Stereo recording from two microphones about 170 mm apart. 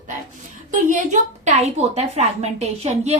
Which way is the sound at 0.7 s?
45° right (ahead or behind).